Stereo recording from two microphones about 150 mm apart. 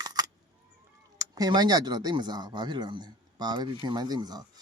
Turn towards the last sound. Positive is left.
turn(degrees=-25)  # may be behind; listen again after turning